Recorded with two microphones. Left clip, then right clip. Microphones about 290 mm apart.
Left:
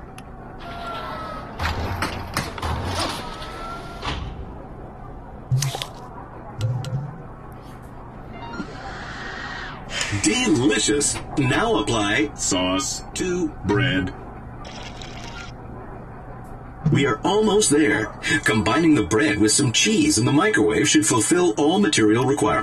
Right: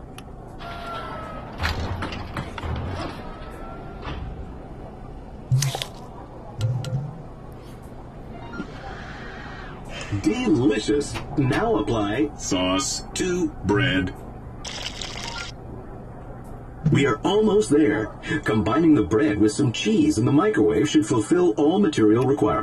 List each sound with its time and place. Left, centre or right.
0.7 s music: centre
2.0 s mechanisms: centre
2.9 s music: left
5.5 s squish: centre
6.6 s music: centre
8.5 s music: centre
10.2 s music: left
11.3 s speech: left
12.4 s a sound: centre
12.7 s music: centre
14.7 s a sound: centre
16.8 s a man's voice: centre
17.5 s speech: left